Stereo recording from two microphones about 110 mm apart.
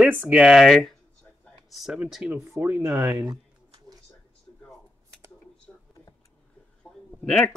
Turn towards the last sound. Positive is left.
turn(degrees=5)  # may be behind; listen again after turning